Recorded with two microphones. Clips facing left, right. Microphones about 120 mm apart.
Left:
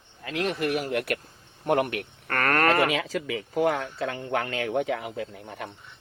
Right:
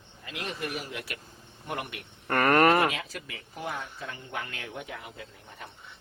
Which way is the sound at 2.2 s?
15° right (ahead or behind).